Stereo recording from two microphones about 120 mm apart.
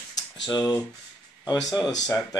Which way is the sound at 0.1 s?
30° left (ahead or behind).